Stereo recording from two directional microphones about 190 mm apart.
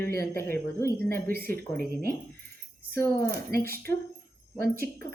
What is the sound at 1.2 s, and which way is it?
Speech, 50° right (ahead or behind).